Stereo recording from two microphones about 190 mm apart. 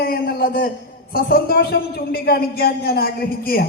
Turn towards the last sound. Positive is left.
turn(degrees=55)  # may be behind; listen again after turning